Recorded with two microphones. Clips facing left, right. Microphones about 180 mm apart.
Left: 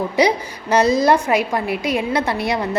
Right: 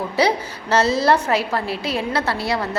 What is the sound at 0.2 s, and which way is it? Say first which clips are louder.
A woman's voice: left 2 dB; 15° left (ahead or behind).